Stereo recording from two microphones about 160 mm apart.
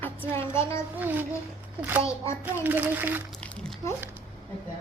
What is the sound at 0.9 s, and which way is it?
Speech, 10° right (ahead or behind).